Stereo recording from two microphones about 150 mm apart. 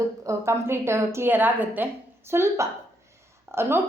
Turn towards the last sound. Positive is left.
turn(degrees=-15)  # may be behind; listen again after turning